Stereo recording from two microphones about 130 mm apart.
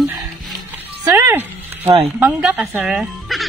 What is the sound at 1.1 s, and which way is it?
Music, 25° right (ahead or behind).